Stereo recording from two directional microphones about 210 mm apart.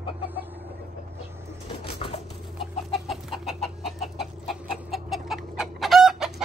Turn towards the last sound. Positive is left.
turn(degrees=0)  # may be behind; listen again after turning